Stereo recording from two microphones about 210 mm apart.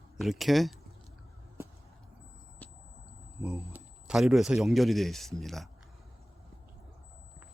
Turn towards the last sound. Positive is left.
turn(degrees=0)  # may be behind; listen again after turning